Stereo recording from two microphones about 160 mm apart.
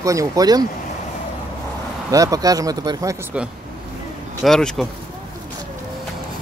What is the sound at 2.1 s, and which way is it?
Speech, 20° right (ahead or behind).